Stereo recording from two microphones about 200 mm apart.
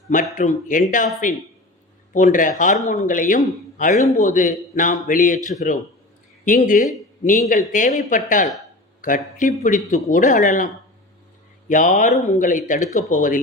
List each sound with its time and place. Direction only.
0.3 s speech: 40° left (ahead or behind)
11.7 s speech: 40° left (ahead or behind)